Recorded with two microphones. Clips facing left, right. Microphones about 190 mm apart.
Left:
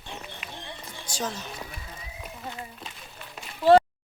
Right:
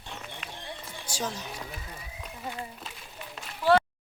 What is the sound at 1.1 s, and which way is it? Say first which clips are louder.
Speech: left 1 dB; 10° right (ahead or behind).